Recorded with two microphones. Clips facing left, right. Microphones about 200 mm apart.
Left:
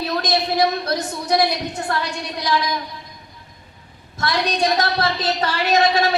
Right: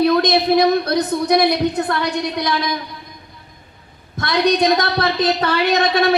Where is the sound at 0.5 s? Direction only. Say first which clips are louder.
Right 6 dB; 60° right (ahead or behind).